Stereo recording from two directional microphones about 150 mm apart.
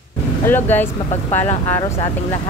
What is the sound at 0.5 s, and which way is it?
A woman's voice, 15° left (ahead or behind).